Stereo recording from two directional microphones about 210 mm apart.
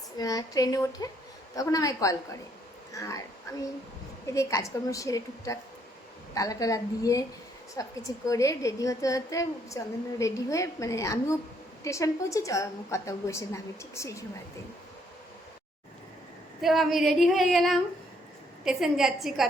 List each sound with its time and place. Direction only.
0.2 s a woman's voice: 15° left (ahead or behind)
4.4 s a woman's voice: 15° left (ahead or behind)
16.6 s female singing: centre (ahead or behind)